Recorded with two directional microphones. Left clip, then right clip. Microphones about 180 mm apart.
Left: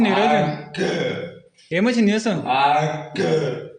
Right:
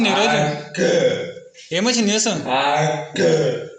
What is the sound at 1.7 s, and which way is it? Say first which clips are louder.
Speech: right 1 dB; 45° left (ahead or behind).